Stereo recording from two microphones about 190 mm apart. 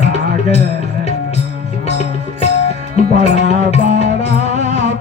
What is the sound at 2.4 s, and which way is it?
Music, 35° left (ahead or behind).